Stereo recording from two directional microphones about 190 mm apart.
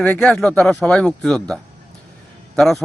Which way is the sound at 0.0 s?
5° left (ahead or behind).